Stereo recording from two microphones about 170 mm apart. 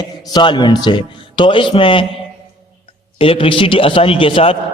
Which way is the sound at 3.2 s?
30° left (ahead or behind).